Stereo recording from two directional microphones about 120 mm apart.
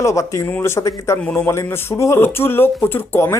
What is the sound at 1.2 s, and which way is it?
Speech, 10° left (ahead or behind).